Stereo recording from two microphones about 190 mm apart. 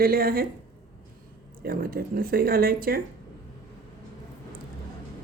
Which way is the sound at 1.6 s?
50° right (ahead or behind).